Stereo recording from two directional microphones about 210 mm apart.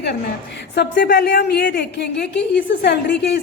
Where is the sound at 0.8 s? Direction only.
50° left (ahead or behind).